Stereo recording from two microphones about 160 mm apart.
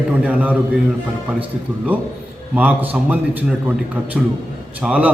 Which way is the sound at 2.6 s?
10° right (ahead or behind).